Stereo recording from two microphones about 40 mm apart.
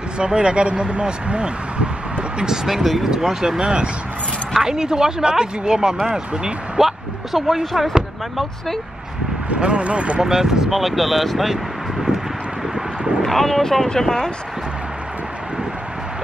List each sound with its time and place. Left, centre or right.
0.2 s speech: right
2.3 s speech: centre
7.3 s speech: centre
9.5 s speech: right
10.2 s speech: centre
10.7 s speech: centre
13.2 s speech: centre